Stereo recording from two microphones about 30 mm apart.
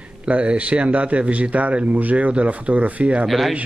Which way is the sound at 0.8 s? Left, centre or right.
Right.